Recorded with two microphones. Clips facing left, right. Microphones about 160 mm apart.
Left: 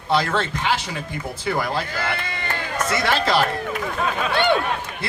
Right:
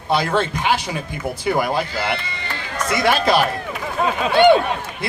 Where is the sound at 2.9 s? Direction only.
15° right (ahead or behind).